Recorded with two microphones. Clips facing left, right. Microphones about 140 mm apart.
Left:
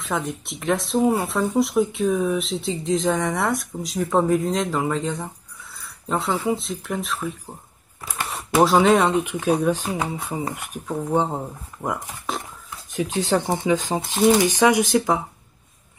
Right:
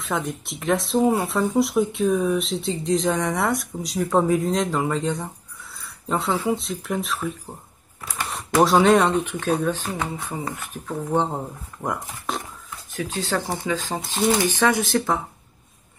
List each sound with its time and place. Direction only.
0.0 s speech: centre (ahead or behind)
9.2 s speech: 10° left (ahead or behind)
11.1 s speech: 5° left (ahead or behind)
12.9 s speech: 20° left (ahead or behind)